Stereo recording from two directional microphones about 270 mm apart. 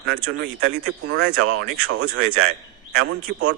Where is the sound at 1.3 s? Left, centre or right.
Right.